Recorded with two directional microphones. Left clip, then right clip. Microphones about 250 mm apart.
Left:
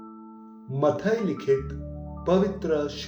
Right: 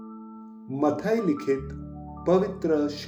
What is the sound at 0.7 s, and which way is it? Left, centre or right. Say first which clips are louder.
Speech: left 1 dB; right.